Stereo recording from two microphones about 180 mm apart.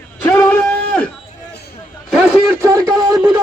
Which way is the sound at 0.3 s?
10° left (ahead or behind).